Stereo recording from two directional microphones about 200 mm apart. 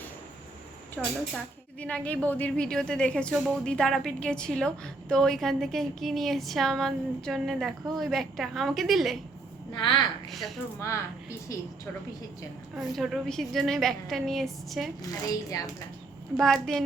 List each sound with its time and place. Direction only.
1.0 s speech: centre (ahead or behind)
10.2 s speech: centre (ahead or behind)
10.8 s a woman's voice: 15° left (ahead or behind)
12.7 s speech: centre (ahead or behind)
15.0 s a woman's voice: 20° left (ahead or behind)
16.4 s speech: 5° left (ahead or behind)